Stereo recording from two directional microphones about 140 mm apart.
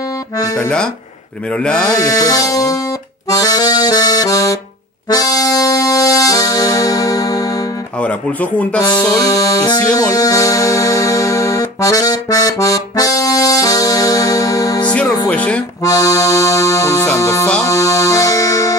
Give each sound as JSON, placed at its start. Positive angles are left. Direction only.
{"t": 0.6, "sound": "speech", "side_deg": 5}
{"t": 2.0, "sound": "music", "side_deg": 25}
{"t": 3.3, "sound": "accordion", "side_deg": 25}
{"t": 5.1, "sound": "music", "side_deg": 25}
{"t": 8.0, "sound": "speech", "side_deg": 10}
{"t": 9.0, "sound": "music", "side_deg": 25}
{"t": 15.2, "sound": "music", "side_deg": 10}
{"t": 15.8, "sound": "accordion", "side_deg": 25}
{"t": 17.1, "sound": "music", "side_deg": 25}